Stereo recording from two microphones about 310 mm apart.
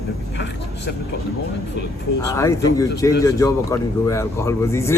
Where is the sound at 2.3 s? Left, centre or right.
Centre.